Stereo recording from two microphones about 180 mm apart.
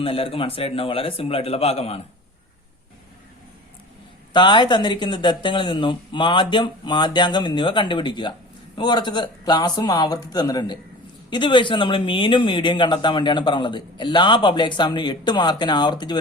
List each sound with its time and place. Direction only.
0.0 s speech: 30° left (ahead or behind)
4.3 s speech: 25° left (ahead or behind)